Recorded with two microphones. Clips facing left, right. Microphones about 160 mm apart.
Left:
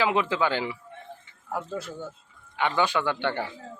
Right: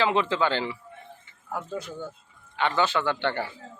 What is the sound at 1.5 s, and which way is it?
Speech, centre (ahead or behind).